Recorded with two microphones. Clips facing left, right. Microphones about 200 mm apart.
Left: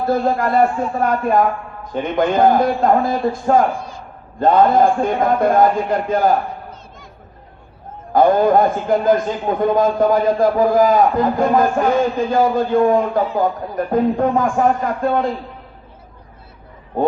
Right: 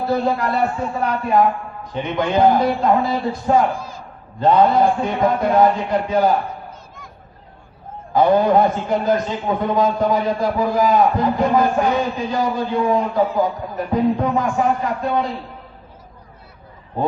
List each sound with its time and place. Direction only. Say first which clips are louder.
0.1 s a man's voice: left 3 dB; 50° left (ahead or behind)
8.1 s a man's voice: left 2 dB; 50° left (ahead or behind)